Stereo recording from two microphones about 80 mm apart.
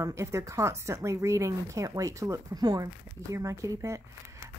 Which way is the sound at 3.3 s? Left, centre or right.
Right.